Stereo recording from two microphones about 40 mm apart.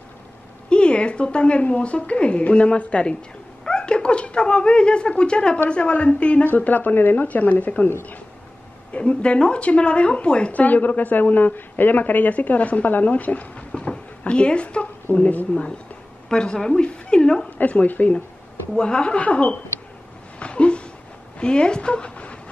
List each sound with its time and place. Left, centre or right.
0.7 s a woman's voice: left
6.4 s speech: left
8.9 s a woman's voice: left
10.5 s a woman's voice: left
13.7 s speech: left
15.1 s a woman's voice: left
16.3 s a woman's voice: centre
17.6 s a woman's voice: left
18.8 s a woman's voice: left
20.3 s a sound: left
21.4 s a woman's voice: left